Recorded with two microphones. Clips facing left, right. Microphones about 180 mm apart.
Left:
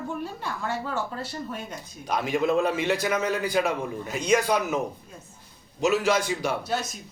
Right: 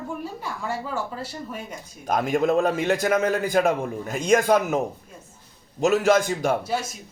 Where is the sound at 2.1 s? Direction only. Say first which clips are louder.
Right 3 dB; 45° right (ahead or behind).